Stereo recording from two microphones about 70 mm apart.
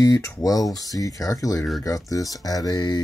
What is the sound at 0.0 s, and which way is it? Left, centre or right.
Speech, left.